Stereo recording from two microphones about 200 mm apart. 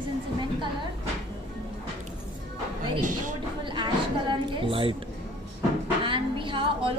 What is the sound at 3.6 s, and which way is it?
A woman's voice, 25° right (ahead or behind).